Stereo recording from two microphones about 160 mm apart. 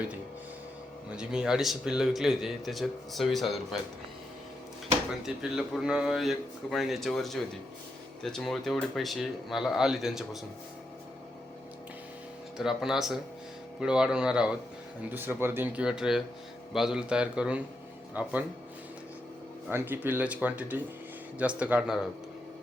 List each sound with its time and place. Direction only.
1.1 s speech: 5° right (ahead or behind)
5.2 s speech: 5° right (ahead or behind)
12.5 s speech: 5° right (ahead or behind)
19.7 s speech: 10° right (ahead or behind)